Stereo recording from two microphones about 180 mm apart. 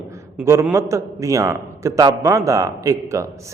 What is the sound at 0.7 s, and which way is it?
A man's voice, 15° right (ahead or behind).